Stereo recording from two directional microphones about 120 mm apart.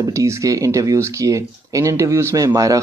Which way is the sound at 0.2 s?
25° right (ahead or behind).